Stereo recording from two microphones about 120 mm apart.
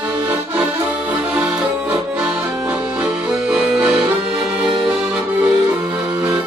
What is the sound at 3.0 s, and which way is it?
Accordion, 5° right (ahead or behind).